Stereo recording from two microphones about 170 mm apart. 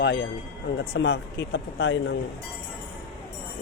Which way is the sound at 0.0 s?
90° left.